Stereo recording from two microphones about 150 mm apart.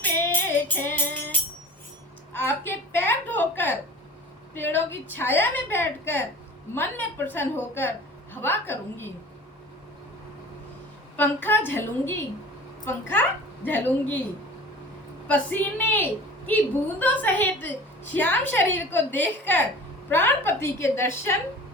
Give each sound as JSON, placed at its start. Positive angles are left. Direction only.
{"t": 0.0, "sound": "music", "side_deg": 15}
{"t": 2.3, "sound": "a sound", "side_deg": 15}
{"t": 4.5, "sound": "a woman's voice", "side_deg": 15}
{"t": 11.2, "sound": "a woman's voice", "side_deg": 15}
{"t": 15.3, "sound": "a woman's voice", "side_deg": 10}